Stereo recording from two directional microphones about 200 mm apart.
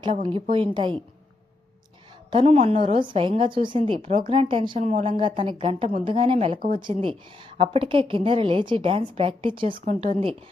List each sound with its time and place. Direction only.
0.0 s a woman's voice: 25° right (ahead or behind)
2.3 s a woman's voice: 30° right (ahead or behind)
4.8 s a woman's voice: 35° right (ahead or behind)
9.7 s a woman's voice: 35° right (ahead or behind)